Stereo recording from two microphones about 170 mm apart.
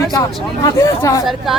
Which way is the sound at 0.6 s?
15° left (ahead or behind).